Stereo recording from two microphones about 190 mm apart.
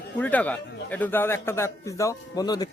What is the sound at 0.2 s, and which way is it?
A man's voice, 10° left (ahead or behind).